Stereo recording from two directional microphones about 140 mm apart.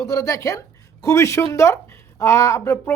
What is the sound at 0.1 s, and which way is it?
A woman's voice, 20° left (ahead or behind).